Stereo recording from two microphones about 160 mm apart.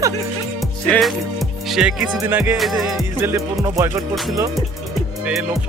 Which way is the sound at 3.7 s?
15° right (ahead or behind).